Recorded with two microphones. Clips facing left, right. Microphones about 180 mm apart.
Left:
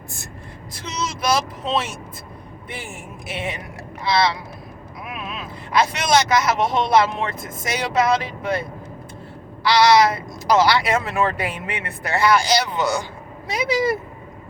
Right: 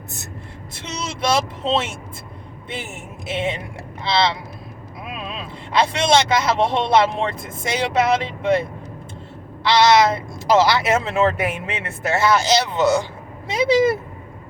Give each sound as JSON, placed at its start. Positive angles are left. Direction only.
{"t": 0.7, "sound": "speech", "side_deg": -25}
{"t": 9.6, "sound": "speech", "side_deg": -25}